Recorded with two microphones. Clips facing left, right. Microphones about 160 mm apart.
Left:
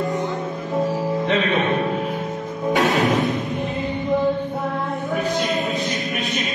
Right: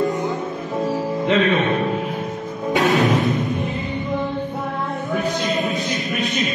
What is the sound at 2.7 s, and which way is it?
Music, 20° right (ahead or behind).